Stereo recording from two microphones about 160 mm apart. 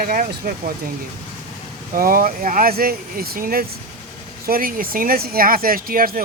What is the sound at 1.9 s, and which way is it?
Speech, 65° right (ahead or behind).